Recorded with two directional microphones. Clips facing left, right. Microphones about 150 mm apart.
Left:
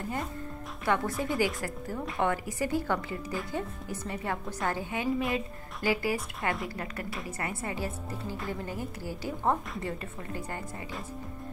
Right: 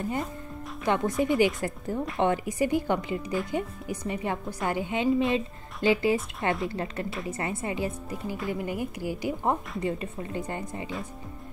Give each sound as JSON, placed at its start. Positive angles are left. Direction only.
{"t": 0.8, "sound": "a woman's voice", "side_deg": -20}